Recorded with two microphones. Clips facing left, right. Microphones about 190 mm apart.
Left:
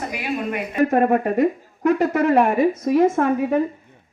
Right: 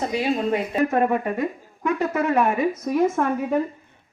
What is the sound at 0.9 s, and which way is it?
A woman's voice, 40° left (ahead or behind).